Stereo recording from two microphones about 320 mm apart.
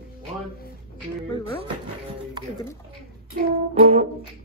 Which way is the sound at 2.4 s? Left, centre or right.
Centre.